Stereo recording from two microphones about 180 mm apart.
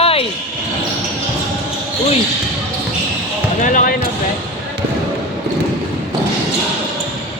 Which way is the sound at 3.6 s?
45° left (ahead or behind).